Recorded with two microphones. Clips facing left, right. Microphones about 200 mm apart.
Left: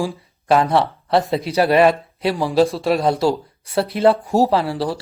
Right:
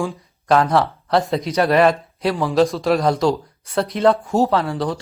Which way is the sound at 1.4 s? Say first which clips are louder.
Left 1 dB; 30° left (ahead or behind).